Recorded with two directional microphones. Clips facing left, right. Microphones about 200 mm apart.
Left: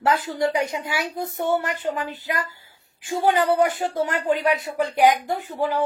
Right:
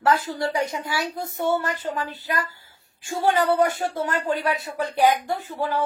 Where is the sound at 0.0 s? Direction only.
20° left (ahead or behind).